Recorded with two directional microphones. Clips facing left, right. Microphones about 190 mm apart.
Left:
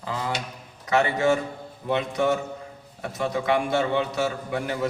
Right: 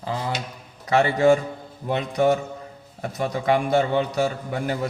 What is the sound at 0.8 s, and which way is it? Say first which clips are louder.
A man's voice: right 4 dB; 35° right (ahead or behind).